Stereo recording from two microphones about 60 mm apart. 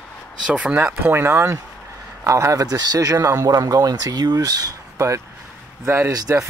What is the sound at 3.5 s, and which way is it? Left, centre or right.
Speech, right.